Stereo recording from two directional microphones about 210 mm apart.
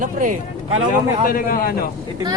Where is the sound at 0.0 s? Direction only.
40° right (ahead or behind).